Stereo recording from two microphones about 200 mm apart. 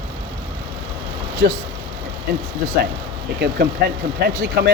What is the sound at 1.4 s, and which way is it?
Speech, 55° right (ahead or behind).